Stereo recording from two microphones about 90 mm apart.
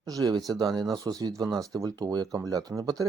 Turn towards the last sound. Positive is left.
turn(degrees=-40)  # may be behind; listen again after turning